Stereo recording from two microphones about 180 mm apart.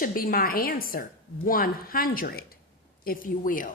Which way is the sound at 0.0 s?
55° left (ahead or behind).